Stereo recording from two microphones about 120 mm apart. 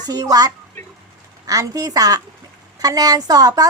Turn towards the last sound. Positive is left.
turn(degrees=-35)  # may be behind; listen again after turning